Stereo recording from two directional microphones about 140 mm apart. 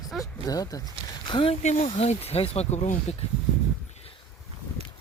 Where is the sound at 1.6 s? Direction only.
55° left (ahead or behind).